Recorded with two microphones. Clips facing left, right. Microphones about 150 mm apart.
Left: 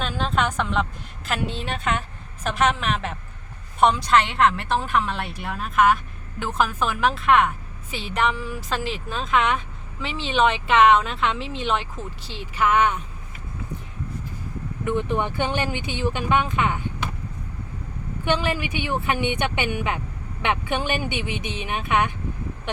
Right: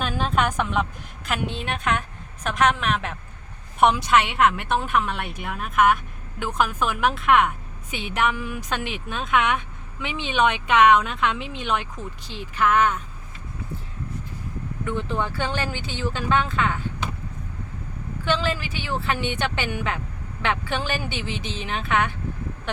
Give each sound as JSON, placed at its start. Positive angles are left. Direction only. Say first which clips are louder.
{"t": 0.0, "sound": "a woman's voice", "louder": "right 1 dB", "side_deg": -5}
{"t": 14.8, "sound": "speech", "louder": "left 3 dB", "side_deg": 15}
{"t": 18.3, "sound": "speech", "louder": "left 1 dB", "side_deg": 15}